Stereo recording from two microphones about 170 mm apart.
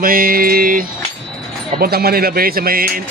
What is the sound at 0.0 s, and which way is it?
Speech, 55° right (ahead or behind).